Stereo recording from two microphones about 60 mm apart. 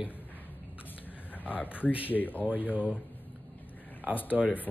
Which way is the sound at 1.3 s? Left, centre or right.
Left.